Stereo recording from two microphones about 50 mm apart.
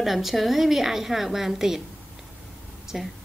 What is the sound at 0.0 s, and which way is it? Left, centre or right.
A woman's voice, centre.